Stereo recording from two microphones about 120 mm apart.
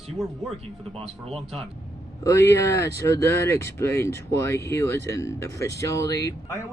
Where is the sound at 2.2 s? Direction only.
25° left (ahead or behind).